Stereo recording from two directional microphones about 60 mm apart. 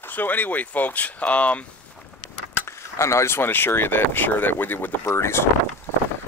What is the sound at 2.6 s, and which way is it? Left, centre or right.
Speech, left.